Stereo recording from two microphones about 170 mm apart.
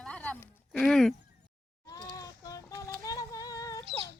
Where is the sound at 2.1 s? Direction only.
20° left (ahead or behind).